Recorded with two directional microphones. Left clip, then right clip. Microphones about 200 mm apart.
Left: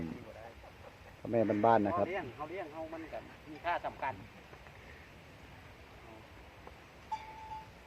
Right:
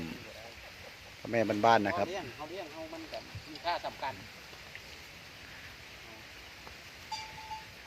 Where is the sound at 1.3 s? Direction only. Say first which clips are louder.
Right 2 dB; 20° right (ahead or behind).